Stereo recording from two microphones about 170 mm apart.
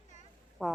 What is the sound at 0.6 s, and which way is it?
Speech, centre (ahead or behind).